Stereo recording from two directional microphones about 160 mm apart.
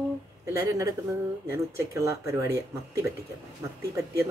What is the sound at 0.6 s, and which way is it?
Speech, 20° right (ahead or behind).